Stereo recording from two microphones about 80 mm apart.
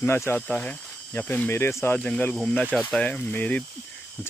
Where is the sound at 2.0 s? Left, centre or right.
Centre.